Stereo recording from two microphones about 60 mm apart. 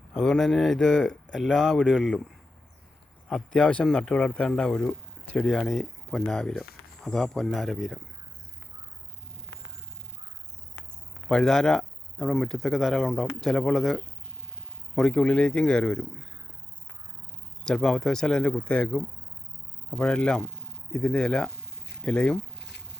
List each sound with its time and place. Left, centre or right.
0.2 s speech: centre
3.5 s speech: centre
11.3 s speech: centre
17.6 s speech: centre